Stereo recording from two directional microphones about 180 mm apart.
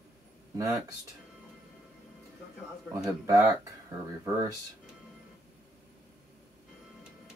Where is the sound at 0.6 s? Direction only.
20° right (ahead or behind).